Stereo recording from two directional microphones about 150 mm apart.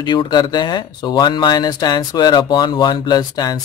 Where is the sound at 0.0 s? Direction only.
30° left (ahead or behind).